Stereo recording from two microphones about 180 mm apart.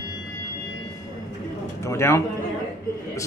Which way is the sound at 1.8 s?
15° left (ahead or behind).